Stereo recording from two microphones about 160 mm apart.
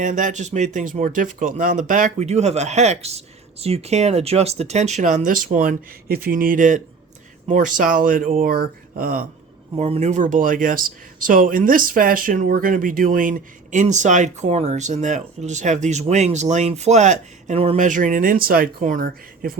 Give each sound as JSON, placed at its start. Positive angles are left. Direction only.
{"t": 0.0, "sound": "speech", "side_deg": -50}
{"t": 9.7, "sound": "speech", "side_deg": -40}